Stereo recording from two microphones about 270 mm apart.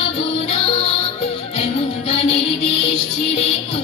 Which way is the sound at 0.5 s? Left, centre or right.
Left.